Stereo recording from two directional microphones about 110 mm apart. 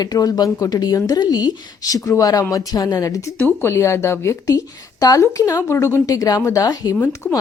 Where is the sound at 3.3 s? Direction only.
20° left (ahead or behind).